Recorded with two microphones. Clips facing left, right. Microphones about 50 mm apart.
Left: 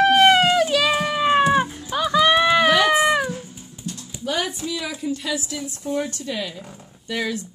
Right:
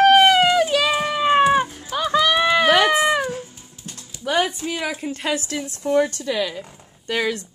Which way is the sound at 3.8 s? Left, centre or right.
Right.